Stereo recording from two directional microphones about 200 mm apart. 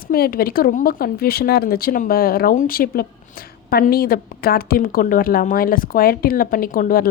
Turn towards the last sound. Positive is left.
turn(degrees=45)  # may be behind; listen again after turning